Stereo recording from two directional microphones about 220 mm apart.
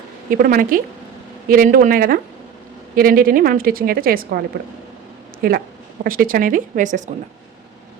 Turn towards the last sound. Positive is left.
turn(degrees=-35)  # may be behind; listen again after turning